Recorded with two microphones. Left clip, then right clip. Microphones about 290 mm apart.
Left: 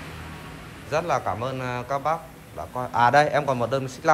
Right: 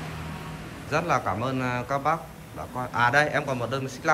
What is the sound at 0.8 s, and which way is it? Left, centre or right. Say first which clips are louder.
A man's voice: left 1 dB; centre.